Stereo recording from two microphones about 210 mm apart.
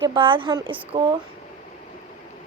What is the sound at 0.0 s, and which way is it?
A woman's voice, 25° right (ahead or behind).